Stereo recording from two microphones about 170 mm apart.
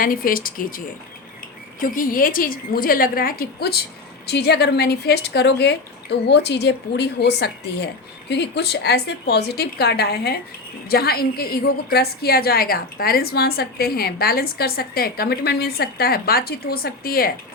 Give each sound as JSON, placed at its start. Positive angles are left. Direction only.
{"t": 0.0, "sound": "a woman's voice", "side_deg": 55}
{"t": 1.8, "sound": "a woman's voice", "side_deg": 55}
{"t": 4.3, "sound": "a woman's voice", "side_deg": 75}